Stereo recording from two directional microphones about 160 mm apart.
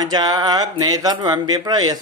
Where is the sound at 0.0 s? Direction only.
25° right (ahead or behind).